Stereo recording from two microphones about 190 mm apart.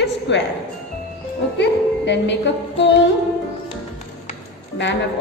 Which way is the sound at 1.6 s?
65° left (ahead or behind).